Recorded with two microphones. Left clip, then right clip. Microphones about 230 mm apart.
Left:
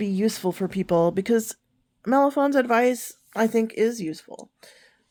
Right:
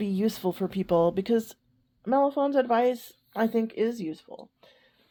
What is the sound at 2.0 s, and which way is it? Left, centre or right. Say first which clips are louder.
Speech: left 4 dB; left.